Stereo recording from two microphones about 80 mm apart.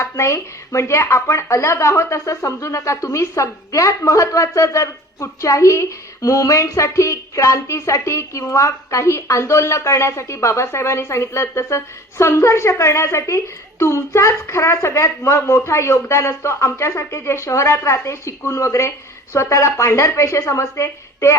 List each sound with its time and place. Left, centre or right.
0.0 s speech: left